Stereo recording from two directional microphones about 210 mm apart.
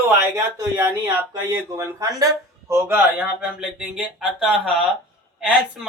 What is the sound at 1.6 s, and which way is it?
Speech, 15° right (ahead or behind).